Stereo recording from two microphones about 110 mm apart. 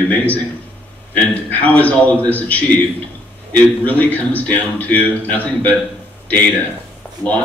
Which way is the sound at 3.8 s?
15° left (ahead or behind).